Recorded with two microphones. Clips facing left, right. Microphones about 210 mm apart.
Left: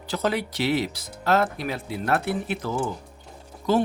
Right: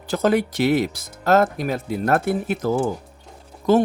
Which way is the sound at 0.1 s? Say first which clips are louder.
Right 7 dB; 50° right (ahead or behind).